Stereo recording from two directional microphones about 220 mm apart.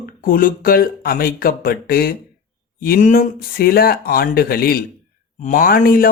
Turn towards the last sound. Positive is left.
turn(degrees=40)  # may be behind; listen again after turning